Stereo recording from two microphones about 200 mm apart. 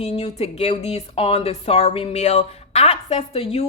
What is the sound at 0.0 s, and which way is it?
Speech, 30° left (ahead or behind).